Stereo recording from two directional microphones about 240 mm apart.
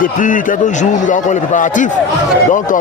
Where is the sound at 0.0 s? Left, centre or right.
Left.